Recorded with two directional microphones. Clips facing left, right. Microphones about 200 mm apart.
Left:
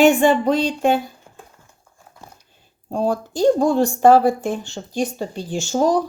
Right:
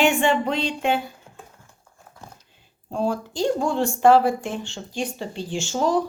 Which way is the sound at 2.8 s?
40° left (ahead or behind).